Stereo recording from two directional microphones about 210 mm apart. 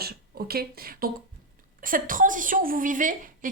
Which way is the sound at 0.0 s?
45° right (ahead or behind).